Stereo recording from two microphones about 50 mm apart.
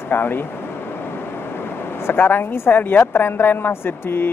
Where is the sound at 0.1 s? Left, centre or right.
Left.